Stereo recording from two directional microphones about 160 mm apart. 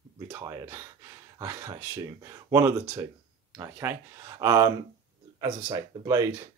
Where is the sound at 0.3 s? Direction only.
15° right (ahead or behind).